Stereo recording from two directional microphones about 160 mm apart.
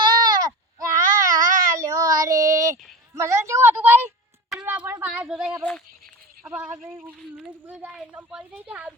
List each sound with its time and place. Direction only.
0.1 s baby cry: 25° right (ahead or behind)
3.2 s speech: 20° right (ahead or behind)
4.4 s a sound: 5° right (ahead or behind)
6.4 s speech: 5° right (ahead or behind)
7.6 s speech: 10° right (ahead or behind)